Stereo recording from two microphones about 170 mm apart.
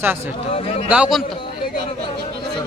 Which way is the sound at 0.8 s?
5° right (ahead or behind).